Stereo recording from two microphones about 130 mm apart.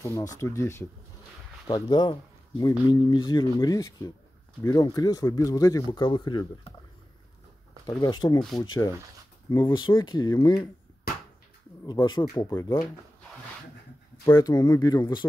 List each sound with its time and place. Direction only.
0.0 s speech: 25° left (ahead or behind)
1.7 s speech: 35° left (ahead or behind)
8.0 s speech: 30° left (ahead or behind)
11.8 s speech: 35° left (ahead or behind)
14.2 s speech: 30° left (ahead or behind)